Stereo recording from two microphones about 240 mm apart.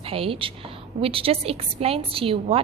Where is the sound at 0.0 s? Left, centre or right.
Right.